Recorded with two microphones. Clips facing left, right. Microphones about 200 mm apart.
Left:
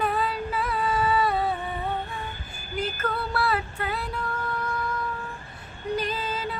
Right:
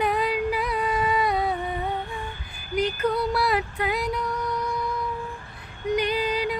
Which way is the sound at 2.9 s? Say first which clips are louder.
Right 5 dB; 15° right (ahead or behind).